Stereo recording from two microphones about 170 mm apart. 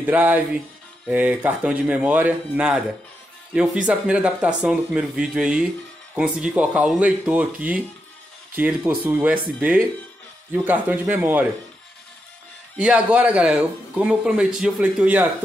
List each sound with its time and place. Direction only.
0.0 s speech: 10° right (ahead or behind)
12.7 s speech: 5° right (ahead or behind)